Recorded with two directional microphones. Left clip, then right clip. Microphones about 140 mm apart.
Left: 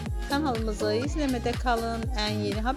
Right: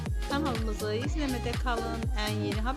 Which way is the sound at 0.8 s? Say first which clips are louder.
Left 6 dB; 35° left (ahead or behind).